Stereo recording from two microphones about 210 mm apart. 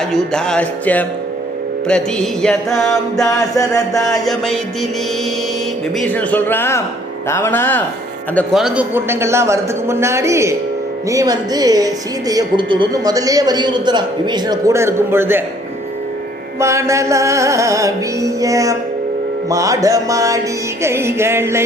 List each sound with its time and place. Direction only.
0.1 s music: 5° left (ahead or behind)
3.2 s a man's voice: 15° left (ahead or behind)
4.3 s music: centre (ahead or behind)
6.0 s a man's voice: 10° left (ahead or behind)
8.4 s a woman's voice: centre (ahead or behind)
16.6 s a woman's voice: 15° right (ahead or behind)